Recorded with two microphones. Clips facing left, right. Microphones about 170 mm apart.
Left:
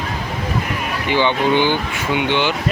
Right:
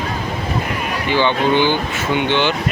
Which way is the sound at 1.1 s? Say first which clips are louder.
Even; 15° left (ahead or behind).